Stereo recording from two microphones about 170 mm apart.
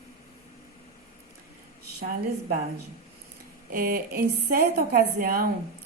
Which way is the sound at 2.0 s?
65° right (ahead or behind).